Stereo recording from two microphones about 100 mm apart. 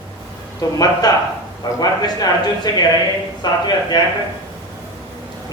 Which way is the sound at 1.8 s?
40° left (ahead or behind).